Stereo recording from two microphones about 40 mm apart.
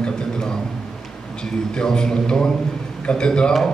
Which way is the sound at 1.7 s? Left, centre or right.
Centre.